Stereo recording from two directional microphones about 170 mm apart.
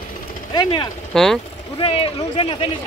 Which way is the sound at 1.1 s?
Centre (ahead or behind).